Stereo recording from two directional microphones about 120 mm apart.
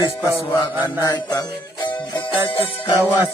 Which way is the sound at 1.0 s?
30° left (ahead or behind).